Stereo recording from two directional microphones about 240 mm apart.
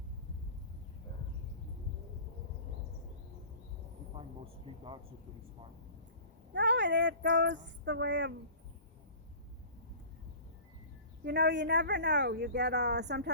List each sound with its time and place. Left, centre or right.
4.1 s a man's voice: right
6.5 s speech: right
11.2 s speech: right